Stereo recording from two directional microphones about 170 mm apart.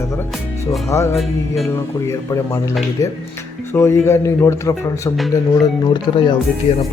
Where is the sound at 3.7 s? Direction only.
15° left (ahead or behind).